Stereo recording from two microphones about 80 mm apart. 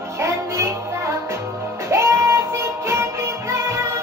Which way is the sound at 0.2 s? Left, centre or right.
Right.